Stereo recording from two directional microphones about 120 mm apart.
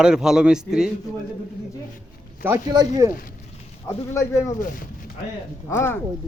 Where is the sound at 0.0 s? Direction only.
5° right (ahead or behind).